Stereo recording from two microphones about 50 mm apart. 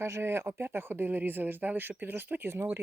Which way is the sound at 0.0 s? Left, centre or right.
Right.